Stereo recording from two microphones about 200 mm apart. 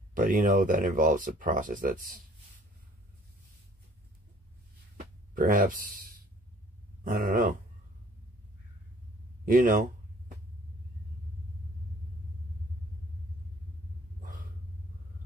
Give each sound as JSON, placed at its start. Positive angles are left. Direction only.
{"t": 0.1, "sound": "speech", "side_deg": -40}
{"t": 5.3, "sound": "speech", "side_deg": -45}
{"t": 7.1, "sound": "speech", "side_deg": -45}
{"t": 9.5, "sound": "a sound", "side_deg": -40}